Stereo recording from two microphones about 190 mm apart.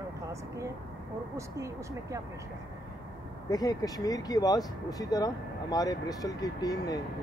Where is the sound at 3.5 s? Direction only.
20° left (ahead or behind).